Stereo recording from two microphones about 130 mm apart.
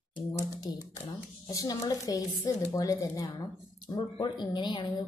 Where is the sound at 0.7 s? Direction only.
30° left (ahead or behind).